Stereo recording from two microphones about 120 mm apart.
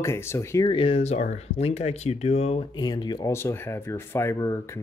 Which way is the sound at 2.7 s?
35° left (ahead or behind).